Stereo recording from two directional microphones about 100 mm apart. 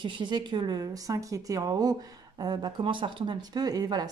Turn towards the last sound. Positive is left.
turn(degrees=-40)  # may be behind; listen again after turning